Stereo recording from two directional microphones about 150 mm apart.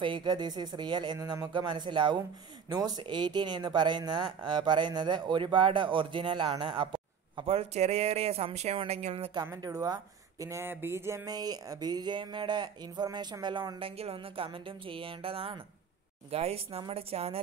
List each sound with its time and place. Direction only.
0.0 s speech: 30° right (ahead or behind)
9.3 s speech: 25° right (ahead or behind); by 17.4 s 40° right (ahead or behind)